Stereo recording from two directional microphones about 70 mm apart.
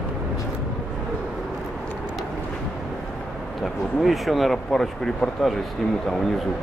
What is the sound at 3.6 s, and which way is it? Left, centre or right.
Speech, centre.